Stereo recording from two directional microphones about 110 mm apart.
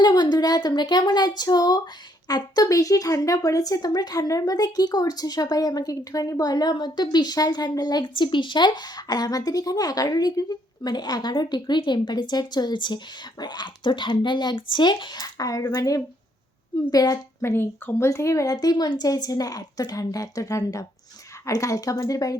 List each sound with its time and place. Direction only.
0.0 s speech: 40° left (ahead or behind)
17.4 s speech: 20° left (ahead or behind)